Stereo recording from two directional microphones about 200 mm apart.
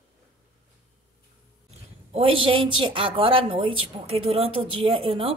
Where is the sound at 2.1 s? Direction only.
25° right (ahead or behind).